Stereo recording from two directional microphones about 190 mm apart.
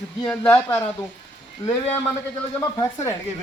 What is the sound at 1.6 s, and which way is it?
Speech, 30° left (ahead or behind).